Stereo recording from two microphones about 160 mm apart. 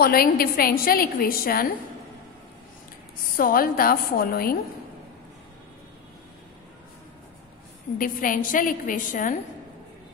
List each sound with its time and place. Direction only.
0.0 s a woman's voice: 65° left (ahead or behind)
3.3 s a woman's voice: 65° left (ahead or behind)
8.0 s a woman's voice: 60° left (ahead or behind)